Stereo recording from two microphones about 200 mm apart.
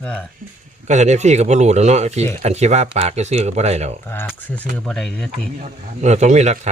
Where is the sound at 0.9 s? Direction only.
35° right (ahead or behind).